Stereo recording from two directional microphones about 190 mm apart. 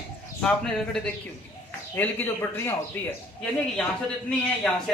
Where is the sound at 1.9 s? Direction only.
10° left (ahead or behind).